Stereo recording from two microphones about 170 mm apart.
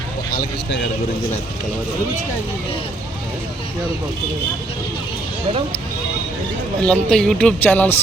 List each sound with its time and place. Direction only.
0.3 s speech: 60° left (ahead or behind)
6.8 s speech: 5° left (ahead or behind)